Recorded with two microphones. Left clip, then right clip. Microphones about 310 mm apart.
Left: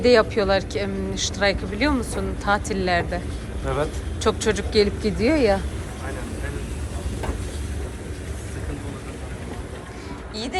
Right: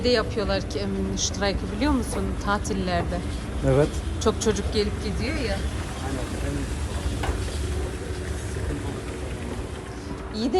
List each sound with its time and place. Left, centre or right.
0.0 s speech: centre
3.7 s speech: right; by 5.6 s centre
10.3 s a sound: centre